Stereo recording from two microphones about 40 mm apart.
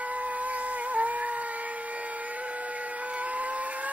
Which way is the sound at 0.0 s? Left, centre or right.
Right.